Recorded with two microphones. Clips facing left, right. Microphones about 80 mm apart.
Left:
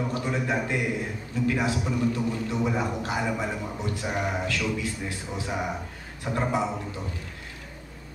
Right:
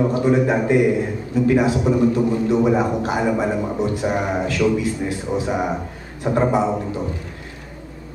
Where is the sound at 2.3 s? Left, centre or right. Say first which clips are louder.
Right 10 dB; right.